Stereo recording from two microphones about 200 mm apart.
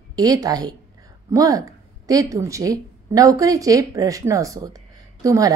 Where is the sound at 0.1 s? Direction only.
20° right (ahead or behind).